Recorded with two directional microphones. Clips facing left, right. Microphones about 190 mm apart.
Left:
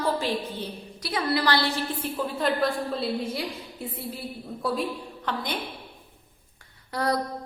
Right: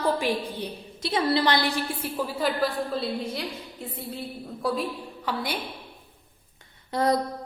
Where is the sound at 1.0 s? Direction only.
25° right (ahead or behind); by 5.6 s 10° right (ahead or behind).